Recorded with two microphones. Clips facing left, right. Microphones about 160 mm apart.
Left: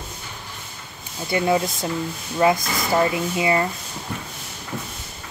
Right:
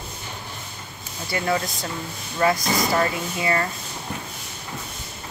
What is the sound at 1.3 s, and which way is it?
Speech, 20° left (ahead or behind).